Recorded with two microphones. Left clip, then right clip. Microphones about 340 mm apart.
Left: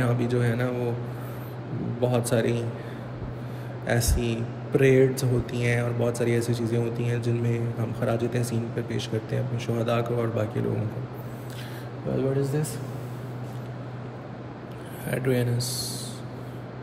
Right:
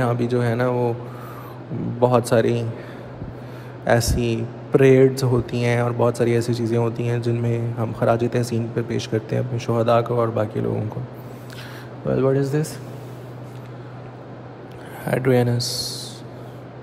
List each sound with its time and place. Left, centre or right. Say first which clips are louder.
0.0 s a man's voice: right 5 dB; centre
2.0 s a man's voice: right 8 dB; centre
3.8 s a man's voice: right 8 dB; centre
12.2 s a man's voice: right 6 dB; right
15.0 s a man's voice: right 8 dB; centre